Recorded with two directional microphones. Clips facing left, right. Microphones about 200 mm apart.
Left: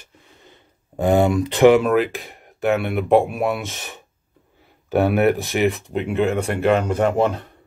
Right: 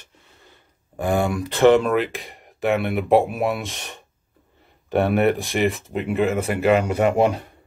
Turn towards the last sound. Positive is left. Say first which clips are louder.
# even
turn(degrees=-10)  # may be behind; listen again after turning